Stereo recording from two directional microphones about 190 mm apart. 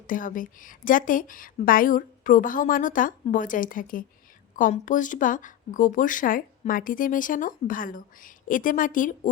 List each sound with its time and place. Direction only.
0.1 s speech: 45° left (ahead or behind)